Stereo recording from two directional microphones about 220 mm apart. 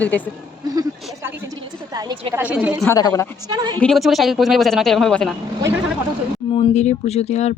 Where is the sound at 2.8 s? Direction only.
10° left (ahead or behind).